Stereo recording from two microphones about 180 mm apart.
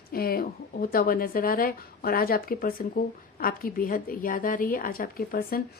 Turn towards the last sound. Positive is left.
turn(degrees=55)  # may be behind; listen again after turning